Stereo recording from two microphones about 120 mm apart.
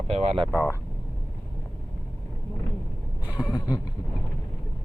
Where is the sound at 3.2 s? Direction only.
15° right (ahead or behind).